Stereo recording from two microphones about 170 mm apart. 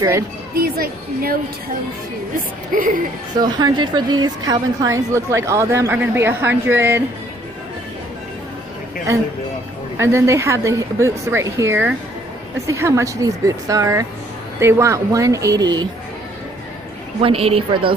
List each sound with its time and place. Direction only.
0.6 s a woman's voice: 60° right (ahead or behind)
2.7 s a woman's voice: 55° right (ahead or behind)
3.3 s a woman's voice: 25° right (ahead or behind)
9.9 s a woman's voice: 15° right (ahead or behind)
17.2 s a woman's voice: 35° right (ahead or behind)